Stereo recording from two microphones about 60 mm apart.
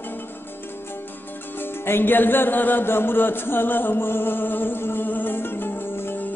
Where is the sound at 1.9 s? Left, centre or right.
Left.